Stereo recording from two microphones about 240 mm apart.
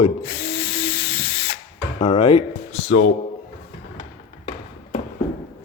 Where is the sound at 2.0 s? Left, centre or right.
Left.